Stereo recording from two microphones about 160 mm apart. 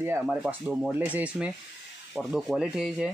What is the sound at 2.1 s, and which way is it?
Rub, 5° right (ahead or behind).